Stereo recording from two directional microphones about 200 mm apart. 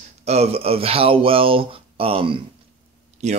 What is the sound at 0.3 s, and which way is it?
Speech, 30° right (ahead or behind).